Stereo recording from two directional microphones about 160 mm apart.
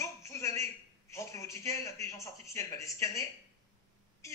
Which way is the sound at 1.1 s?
20° left (ahead or behind).